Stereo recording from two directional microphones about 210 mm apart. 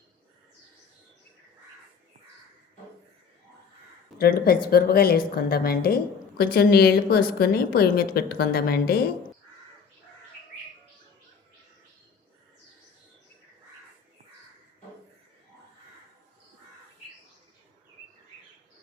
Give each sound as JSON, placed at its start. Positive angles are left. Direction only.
{"t": 4.2, "sound": "speech", "side_deg": 45}